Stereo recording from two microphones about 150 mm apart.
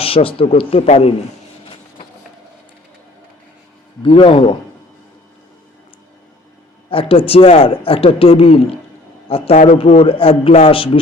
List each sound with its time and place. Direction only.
0.0 s speech: 40° left (ahead or behind)
4.0 s speech: 35° left (ahead or behind)
6.9 s speech: 35° left (ahead or behind)